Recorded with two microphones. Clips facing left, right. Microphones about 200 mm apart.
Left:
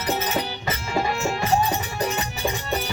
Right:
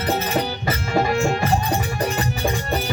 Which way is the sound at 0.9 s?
50° right (ahead or behind).